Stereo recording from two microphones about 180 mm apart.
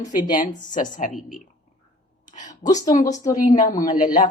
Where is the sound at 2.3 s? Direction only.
45° left (ahead or behind).